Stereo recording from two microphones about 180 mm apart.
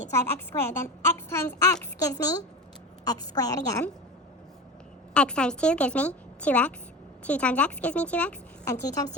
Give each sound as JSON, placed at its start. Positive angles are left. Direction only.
{"t": 0.3, "sound": "a woman's voice", "side_deg": 15}
{"t": 5.1, "sound": "a woman's voice", "side_deg": 5}